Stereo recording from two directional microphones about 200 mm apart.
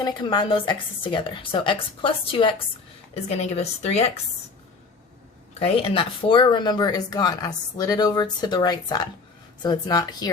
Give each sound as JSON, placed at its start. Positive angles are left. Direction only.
{"t": 0.0, "sound": "speech", "side_deg": 20}
{"t": 5.5, "sound": "speech", "side_deg": 30}